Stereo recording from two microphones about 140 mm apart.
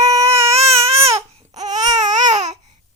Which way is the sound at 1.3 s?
50° right (ahead or behind).